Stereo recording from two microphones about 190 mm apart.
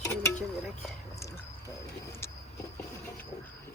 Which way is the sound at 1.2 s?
15° left (ahead or behind).